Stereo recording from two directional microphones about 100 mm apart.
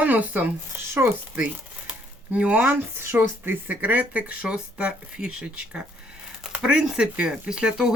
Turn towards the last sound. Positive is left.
turn(degrees=-5)  # may be behind; listen again after turning